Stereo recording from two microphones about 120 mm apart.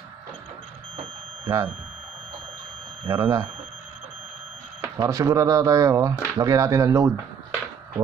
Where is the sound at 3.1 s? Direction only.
25° right (ahead or behind).